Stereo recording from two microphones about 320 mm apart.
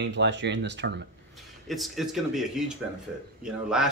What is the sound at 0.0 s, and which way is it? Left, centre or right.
Speech, right.